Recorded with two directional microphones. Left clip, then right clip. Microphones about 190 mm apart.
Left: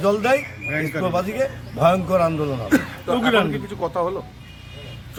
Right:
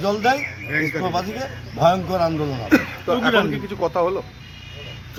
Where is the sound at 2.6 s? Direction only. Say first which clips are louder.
Right 4 dB; 30° right (ahead or behind).